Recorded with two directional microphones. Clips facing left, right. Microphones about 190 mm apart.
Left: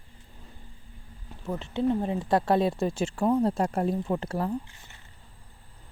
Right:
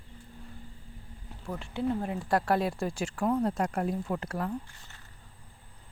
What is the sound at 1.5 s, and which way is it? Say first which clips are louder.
Speech: left 5 dB; 20° left (ahead or behind).